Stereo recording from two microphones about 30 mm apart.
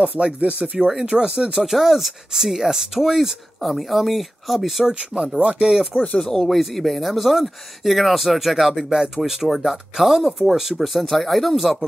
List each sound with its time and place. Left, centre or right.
0.4 s speech: right
0.7 s speech: centre
1.0 s speech: right
1.6 s speech: centre
5.1 s speech: centre
6.2 s speech: centre